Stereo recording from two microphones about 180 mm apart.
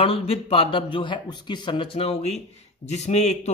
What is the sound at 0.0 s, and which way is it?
A man's voice, 30° left (ahead or behind).